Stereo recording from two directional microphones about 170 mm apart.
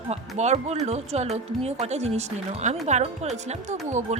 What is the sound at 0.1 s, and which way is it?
Speech, 40° right (ahead or behind).